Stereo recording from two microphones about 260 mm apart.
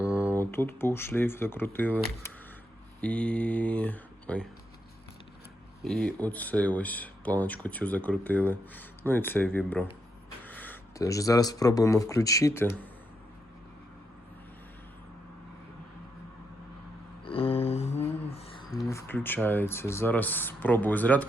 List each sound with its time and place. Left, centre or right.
0.2 s speech: centre
5.8 s speech: centre
17.2 s a sound: left
18.9 s speech: centre